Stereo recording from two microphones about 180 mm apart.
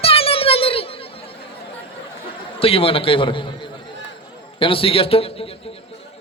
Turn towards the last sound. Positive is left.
turn(degrees=30)  # may be behind; listen again after turning